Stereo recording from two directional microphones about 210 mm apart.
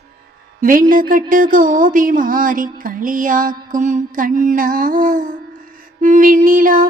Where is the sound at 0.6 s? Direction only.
40° right (ahead or behind).